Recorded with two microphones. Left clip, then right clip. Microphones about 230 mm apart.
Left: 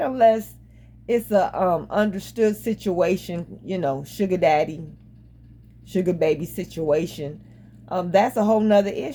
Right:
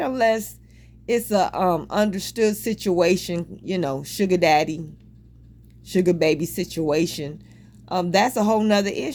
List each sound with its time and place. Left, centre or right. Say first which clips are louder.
0.0 s a woman's voice: left 3 dB; right
1.8 s speech: even; right
5.9 s speech: right 2 dB; right
7.9 s a woman's voice: even; right
8.3 s speech: left 2 dB; right